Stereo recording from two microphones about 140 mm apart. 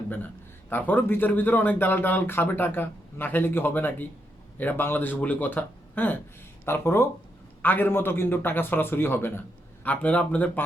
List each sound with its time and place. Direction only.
0.7 s speech: 10° left (ahead or behind)